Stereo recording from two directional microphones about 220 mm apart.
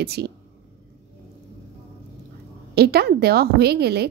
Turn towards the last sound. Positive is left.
turn(degrees=-45)  # may be behind; listen again after turning